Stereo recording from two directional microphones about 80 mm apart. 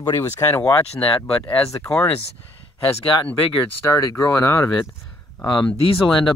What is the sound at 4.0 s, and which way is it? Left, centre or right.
Speech, left.